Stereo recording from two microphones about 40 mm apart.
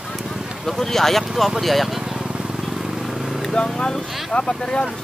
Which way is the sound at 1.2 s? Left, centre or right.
Centre.